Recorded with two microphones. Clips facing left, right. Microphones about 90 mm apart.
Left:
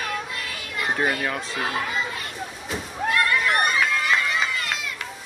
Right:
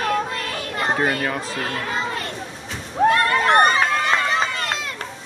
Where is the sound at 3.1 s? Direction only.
35° right (ahead or behind).